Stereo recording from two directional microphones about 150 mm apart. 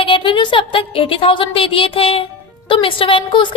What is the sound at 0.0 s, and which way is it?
A woman's voice, 35° left (ahead or behind).